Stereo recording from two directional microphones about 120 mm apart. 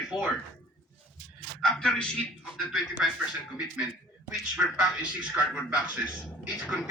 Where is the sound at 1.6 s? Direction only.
5° left (ahead or behind).